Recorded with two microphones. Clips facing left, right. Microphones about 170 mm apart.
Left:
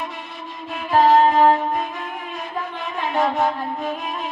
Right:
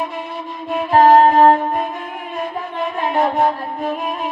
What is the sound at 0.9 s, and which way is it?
Music, 55° right (ahead or behind).